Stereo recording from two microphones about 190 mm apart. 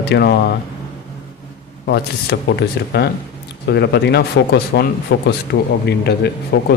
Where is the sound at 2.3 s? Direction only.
65° left (ahead or behind).